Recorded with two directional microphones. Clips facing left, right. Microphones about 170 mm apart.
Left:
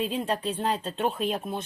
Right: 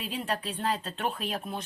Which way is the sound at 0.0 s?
25° left (ahead or behind).